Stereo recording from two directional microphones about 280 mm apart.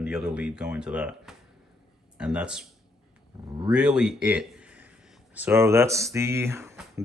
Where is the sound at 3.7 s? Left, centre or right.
Centre.